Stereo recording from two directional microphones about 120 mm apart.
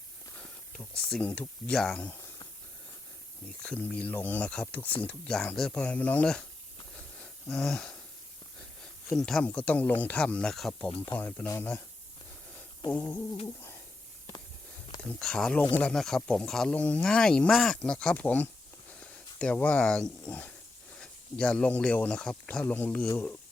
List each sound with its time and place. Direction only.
0.8 s speech: 10° left (ahead or behind)
3.6 s speech: 10° left (ahead or behind)
7.2 s a sound: 5° left (ahead or behind)
9.1 s speech: 5° left (ahead or behind)
12.9 s speech: 15° left (ahead or behind)
15.2 s speech: 5° left (ahead or behind)